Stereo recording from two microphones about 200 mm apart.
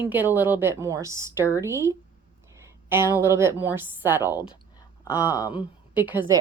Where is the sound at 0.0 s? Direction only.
10° right (ahead or behind).